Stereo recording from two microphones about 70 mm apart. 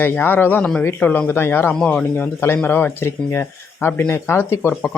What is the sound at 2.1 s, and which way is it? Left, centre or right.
Speech, left.